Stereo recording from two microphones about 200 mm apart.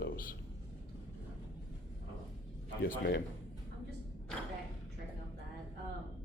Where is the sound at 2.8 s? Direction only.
50° left (ahead or behind).